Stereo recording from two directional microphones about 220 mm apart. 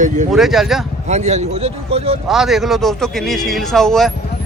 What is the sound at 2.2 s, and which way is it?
A man's voice, centre (ahead or behind).